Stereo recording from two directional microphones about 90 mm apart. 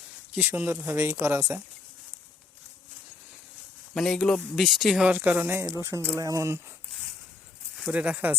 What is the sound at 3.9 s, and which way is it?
Speech, 5° left (ahead or behind).